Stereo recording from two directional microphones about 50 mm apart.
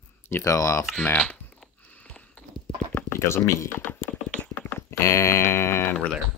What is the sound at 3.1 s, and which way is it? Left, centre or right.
Speech, left.